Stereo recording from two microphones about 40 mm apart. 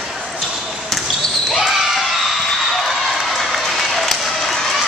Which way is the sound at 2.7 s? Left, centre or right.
Centre.